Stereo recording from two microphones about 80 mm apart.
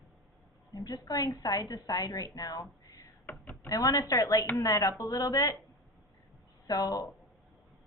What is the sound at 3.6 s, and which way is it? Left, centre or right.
A woman's voice, left.